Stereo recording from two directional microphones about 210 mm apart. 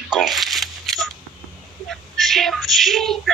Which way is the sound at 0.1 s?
Centre (ahead or behind).